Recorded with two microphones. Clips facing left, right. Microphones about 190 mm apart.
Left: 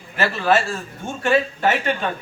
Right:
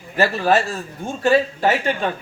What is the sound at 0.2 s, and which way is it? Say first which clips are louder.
Speech: right 2 dB; 40° right (ahead or behind).